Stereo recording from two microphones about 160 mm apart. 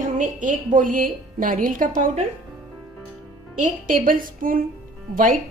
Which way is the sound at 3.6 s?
60° right (ahead or behind).